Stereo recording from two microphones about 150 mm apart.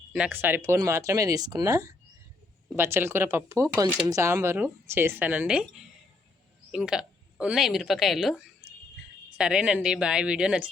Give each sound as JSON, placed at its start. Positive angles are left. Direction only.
{"t": 0.1, "sound": "speech", "side_deg": -10}
{"t": 6.7, "sound": "a woman's voice", "side_deg": -5}